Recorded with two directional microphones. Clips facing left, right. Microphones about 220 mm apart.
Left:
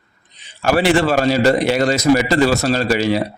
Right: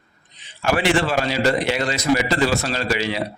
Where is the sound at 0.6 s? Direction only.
40° left (ahead or behind).